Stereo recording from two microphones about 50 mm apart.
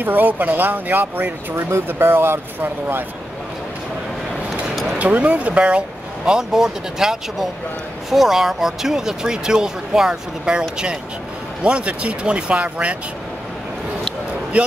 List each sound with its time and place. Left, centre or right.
0.0 s speech: right
4.9 s speech: right
11.6 s speech: right